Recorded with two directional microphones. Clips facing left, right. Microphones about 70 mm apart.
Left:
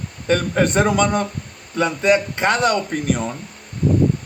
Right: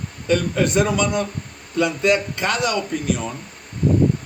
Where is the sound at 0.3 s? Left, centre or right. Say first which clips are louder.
Left 1 dB; left.